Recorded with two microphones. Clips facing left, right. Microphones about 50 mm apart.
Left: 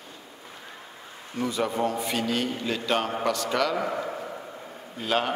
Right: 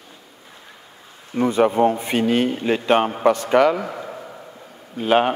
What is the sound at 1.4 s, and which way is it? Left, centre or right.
A man's voice, right.